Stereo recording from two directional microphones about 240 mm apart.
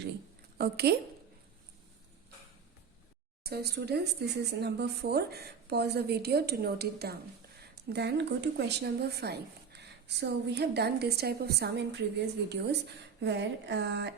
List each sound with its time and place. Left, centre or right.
0.6 s a woman's voice: right
3.4 s a woman's voice: right